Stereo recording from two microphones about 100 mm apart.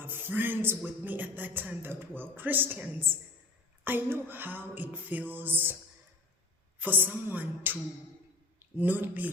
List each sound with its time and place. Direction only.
0.0 s a man's voice: 20° right (ahead or behind)
6.7 s a woman's voice: 20° right (ahead or behind)